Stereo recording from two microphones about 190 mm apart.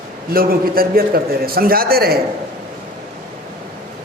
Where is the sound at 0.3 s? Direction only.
50° right (ahead or behind).